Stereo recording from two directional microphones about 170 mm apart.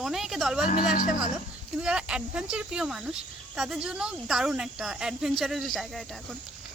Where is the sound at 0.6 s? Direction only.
50° left (ahead or behind).